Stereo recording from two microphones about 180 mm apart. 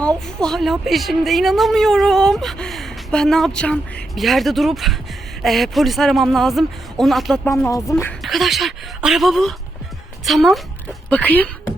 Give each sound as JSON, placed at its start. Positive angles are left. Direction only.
{"t": 0.3, "sound": "a woman's voice", "side_deg": 5}
{"t": 7.4, "sound": "speech", "side_deg": 15}
{"t": 8.2, "sound": "a woman's voice", "side_deg": 0}